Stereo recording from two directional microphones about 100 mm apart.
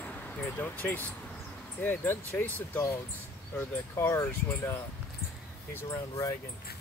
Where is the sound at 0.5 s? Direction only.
15° left (ahead or behind).